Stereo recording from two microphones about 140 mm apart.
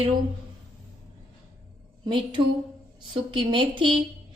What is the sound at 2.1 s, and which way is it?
A woman's voice, 35° right (ahead or behind).